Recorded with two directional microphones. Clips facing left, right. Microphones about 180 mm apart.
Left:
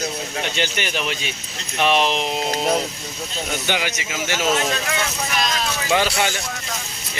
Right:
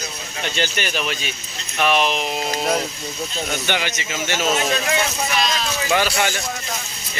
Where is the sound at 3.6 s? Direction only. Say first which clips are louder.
Even; 10° left (ahead or behind).